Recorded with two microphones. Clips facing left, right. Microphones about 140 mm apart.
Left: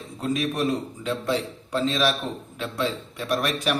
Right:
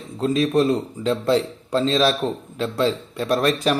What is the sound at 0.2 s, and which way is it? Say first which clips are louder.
A man's voice: right 7 dB; 30° right (ahead or behind).